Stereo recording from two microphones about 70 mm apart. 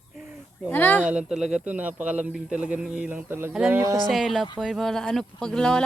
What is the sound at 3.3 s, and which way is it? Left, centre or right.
Speech, right.